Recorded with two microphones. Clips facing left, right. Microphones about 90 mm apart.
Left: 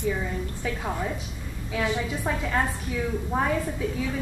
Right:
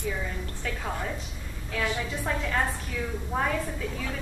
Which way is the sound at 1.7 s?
10° left (ahead or behind).